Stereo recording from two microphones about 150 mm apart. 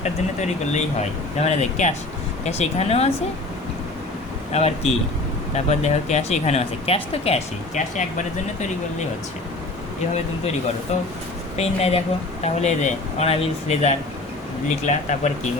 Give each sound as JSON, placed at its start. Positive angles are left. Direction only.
{"t": 0.0, "sound": "speech", "side_deg": 50}
{"t": 4.5, "sound": "speech", "side_deg": 45}
{"t": 11.5, "sound": "speech", "side_deg": 45}